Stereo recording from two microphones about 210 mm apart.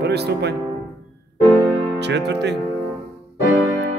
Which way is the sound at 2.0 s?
55° right (ahead or behind).